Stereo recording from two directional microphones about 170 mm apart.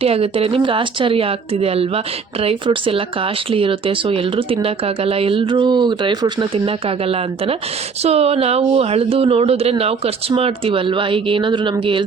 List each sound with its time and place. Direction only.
0.0 s speech: 35° right (ahead or behind)